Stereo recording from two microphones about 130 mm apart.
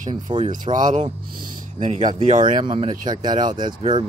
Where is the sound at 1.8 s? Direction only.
60° right (ahead or behind).